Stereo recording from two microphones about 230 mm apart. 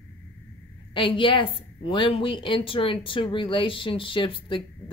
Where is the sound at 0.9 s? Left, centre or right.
Left.